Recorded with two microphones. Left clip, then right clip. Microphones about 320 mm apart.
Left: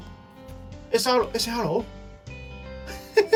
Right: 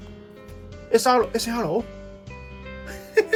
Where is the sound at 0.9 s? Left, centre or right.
Centre.